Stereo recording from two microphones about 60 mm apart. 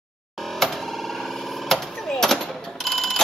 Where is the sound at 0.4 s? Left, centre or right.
Centre.